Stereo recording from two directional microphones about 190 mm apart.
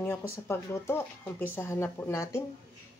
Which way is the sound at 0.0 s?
15° left (ahead or behind).